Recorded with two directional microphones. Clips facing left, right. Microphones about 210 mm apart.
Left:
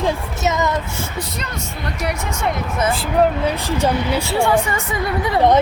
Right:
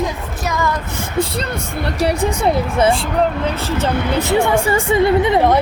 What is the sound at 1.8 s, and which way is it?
Speech, 30° right (ahead or behind).